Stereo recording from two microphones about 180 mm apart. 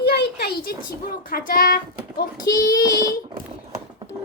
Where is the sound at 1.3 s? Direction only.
55° left (ahead or behind).